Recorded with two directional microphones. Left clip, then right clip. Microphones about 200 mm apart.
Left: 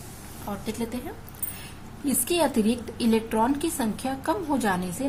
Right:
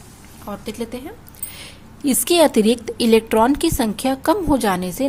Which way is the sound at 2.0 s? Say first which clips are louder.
Right 9 dB; 45° right (ahead or behind).